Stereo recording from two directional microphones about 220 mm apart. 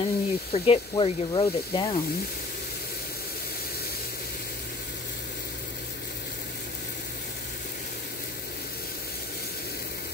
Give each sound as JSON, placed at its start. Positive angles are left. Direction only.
{"t": 0.0, "sound": "speech", "side_deg": 25}